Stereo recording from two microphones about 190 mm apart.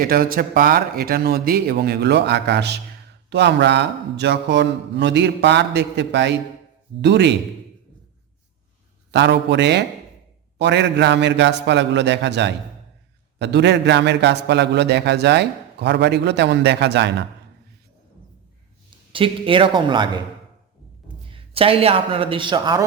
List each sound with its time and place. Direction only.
0.0 s a man's voice: 50° right (ahead or behind); by 7.3 s 65° right (ahead or behind)
9.1 s a man's voice: 65° right (ahead or behind)
19.1 s a man's voice: 25° right (ahead or behind)
21.2 s speech: 30° right (ahead or behind)